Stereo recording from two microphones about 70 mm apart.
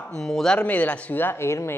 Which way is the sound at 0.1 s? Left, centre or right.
Centre.